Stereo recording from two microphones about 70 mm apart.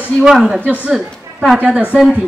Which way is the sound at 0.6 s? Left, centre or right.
Left.